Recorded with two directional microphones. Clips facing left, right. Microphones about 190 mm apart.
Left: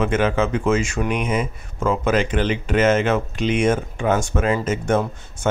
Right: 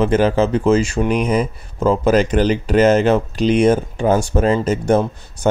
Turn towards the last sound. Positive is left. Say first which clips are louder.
# right 5 dB
turn(degrees=-35)  # may be behind; listen again after turning